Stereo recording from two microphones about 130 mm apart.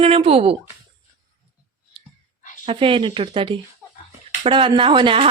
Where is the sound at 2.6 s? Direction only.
40° right (ahead or behind).